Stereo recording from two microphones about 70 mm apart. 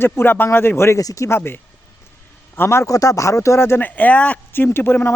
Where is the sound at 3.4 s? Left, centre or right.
Left.